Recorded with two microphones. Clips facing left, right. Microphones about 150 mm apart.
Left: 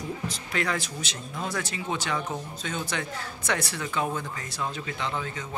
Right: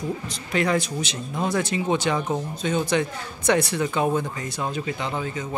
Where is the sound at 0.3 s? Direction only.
20° right (ahead or behind).